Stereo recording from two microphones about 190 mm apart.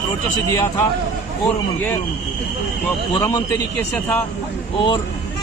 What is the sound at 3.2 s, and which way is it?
Speech, 15° left (ahead or behind).